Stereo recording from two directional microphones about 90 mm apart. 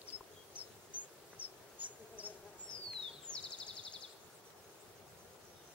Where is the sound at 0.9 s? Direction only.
15° right (ahead or behind).